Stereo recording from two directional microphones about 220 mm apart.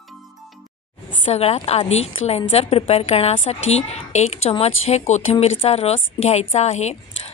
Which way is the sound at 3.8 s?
30° left (ahead or behind).